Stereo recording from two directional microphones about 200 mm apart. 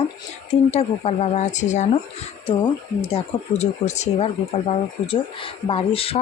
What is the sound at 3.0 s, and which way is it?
Speech, 30° left (ahead or behind).